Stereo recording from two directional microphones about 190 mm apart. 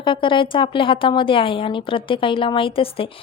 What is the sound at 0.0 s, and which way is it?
A woman's voice, 25° left (ahead or behind).